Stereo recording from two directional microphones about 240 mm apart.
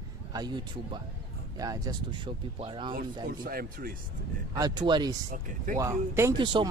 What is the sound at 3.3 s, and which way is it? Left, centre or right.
Speech, right.